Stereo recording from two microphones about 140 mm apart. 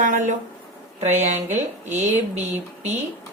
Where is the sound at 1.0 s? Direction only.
55° right (ahead or behind).